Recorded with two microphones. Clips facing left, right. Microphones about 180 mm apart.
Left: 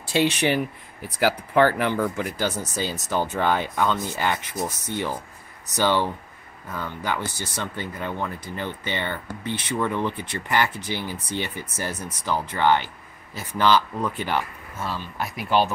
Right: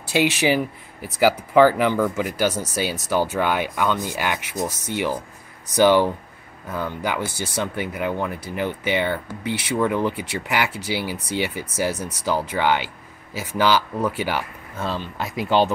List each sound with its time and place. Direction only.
0.1 s speech: 5° right (ahead or behind)
14.9 s speech: 25° right (ahead or behind)